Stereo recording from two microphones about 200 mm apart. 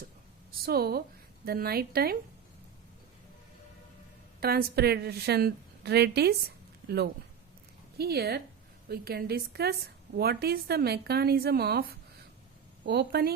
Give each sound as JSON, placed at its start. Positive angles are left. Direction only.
{"t": 0.6, "sound": "a woman's voice", "side_deg": -50}
{"t": 4.4, "sound": "a woman's voice", "side_deg": -50}